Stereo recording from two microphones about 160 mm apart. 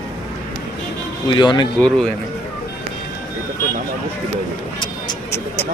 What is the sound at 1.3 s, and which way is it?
Speech, 30° left (ahead or behind).